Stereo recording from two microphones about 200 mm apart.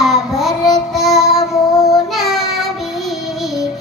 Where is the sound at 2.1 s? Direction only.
Centre (ahead or behind).